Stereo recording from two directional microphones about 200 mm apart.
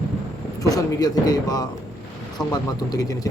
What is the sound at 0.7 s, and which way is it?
A man's voice, 20° left (ahead or behind).